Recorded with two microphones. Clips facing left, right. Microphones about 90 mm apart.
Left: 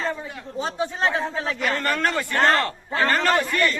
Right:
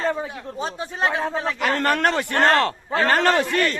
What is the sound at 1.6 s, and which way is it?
A man's voice, 65° right (ahead or behind).